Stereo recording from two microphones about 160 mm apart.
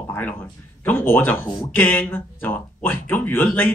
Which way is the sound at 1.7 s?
10° left (ahead or behind).